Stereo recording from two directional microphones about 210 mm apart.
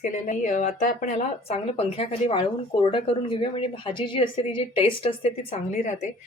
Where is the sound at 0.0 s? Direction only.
35° left (ahead or behind).